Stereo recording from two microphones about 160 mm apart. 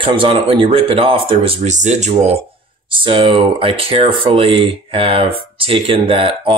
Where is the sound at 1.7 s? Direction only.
45° right (ahead or behind).